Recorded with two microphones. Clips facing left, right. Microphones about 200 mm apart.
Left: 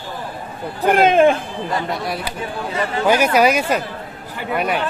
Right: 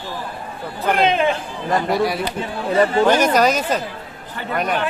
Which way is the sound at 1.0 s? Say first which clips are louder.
Left 6 dB; 50° left (ahead or behind).